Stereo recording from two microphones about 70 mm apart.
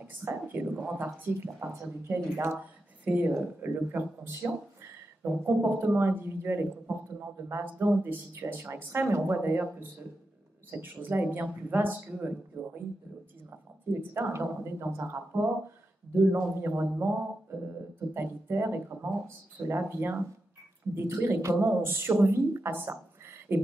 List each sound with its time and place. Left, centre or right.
0.2 s a man's voice: right
0.9 s speech: right
2.5 s a man's voice: right
7.8 s a man's voice: right
13.9 s a man's voice: right
18.1 s a man's voice: right